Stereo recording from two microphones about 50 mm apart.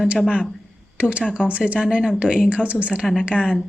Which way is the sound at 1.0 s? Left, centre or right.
Right.